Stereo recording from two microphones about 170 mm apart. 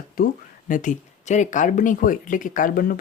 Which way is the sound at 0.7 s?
50° left (ahead or behind).